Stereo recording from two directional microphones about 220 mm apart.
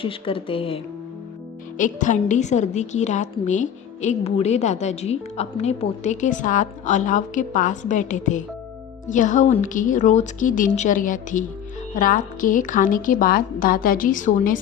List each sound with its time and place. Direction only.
0.0 s speech: 25° left (ahead or behind)
1.8 s a woman's voice: 35° left (ahead or behind)